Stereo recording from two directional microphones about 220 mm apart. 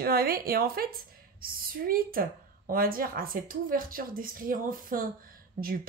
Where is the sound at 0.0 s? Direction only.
45° right (ahead or behind).